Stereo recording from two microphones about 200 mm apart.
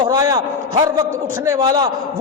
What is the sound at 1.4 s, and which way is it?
Speech, 15° right (ahead or behind).